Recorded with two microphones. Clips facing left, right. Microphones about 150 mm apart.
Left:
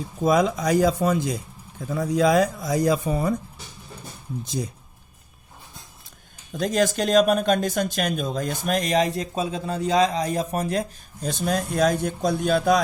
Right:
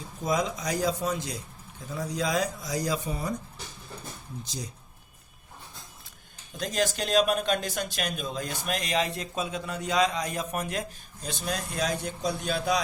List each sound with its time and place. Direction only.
0.2 s speech: 60° left (ahead or behind)
4.4 s speech: 55° left (ahead or behind)
6.5 s speech: 50° left (ahead or behind)